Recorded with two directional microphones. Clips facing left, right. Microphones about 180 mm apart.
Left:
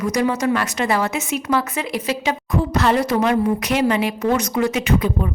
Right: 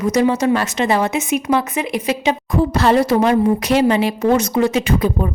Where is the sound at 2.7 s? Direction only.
30° right (ahead or behind).